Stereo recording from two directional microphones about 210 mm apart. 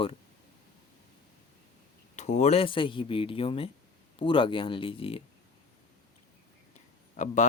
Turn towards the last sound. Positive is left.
turn(degrees=35)  # may be behind; listen again after turning